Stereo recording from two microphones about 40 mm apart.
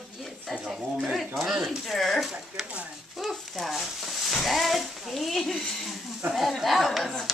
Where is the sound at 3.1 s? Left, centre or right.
Centre.